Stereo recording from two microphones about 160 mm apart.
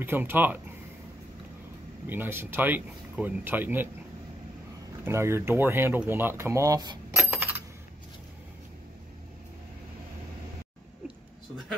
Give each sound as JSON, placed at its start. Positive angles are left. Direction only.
{"t": 0.0, "sound": "speech", "side_deg": -10}
{"t": 2.0, "sound": "speech", "side_deg": -15}
{"t": 5.0, "sound": "speech", "side_deg": -15}
{"t": 7.2, "sound": "coin", "side_deg": -10}